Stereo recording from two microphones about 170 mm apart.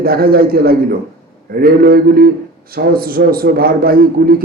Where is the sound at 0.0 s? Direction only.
65° right (ahead or behind).